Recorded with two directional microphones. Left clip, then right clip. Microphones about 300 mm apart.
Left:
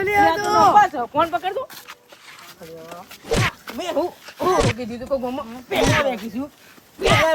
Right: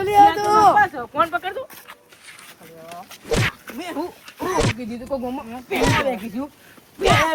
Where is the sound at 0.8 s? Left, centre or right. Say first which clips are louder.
Left 2 dB; centre.